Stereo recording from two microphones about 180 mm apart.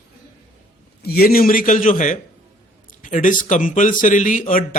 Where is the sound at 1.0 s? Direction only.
60° left (ahead or behind).